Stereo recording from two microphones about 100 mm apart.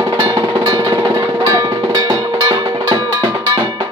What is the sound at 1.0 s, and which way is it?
Music, 30° right (ahead or behind).